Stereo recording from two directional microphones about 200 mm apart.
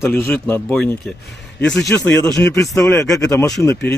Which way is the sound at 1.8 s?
15° left (ahead or behind).